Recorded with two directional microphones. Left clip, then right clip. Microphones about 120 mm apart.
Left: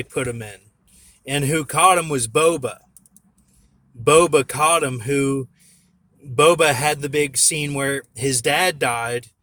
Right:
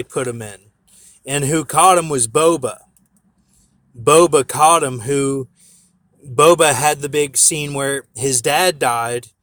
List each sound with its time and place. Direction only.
0.1 s speech: 35° right (ahead or behind)
4.0 s speech: 35° right (ahead or behind)